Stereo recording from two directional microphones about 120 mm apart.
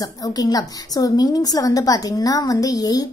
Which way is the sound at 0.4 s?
30° left (ahead or behind).